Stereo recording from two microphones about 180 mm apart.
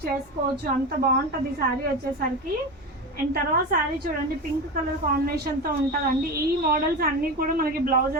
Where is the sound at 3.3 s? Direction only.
55° right (ahead or behind).